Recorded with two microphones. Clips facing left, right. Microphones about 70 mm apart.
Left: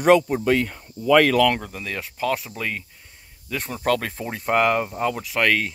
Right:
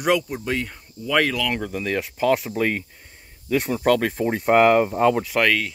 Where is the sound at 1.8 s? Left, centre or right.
Right.